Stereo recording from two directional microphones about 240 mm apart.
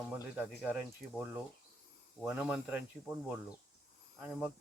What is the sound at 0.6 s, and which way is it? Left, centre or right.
Speech, centre.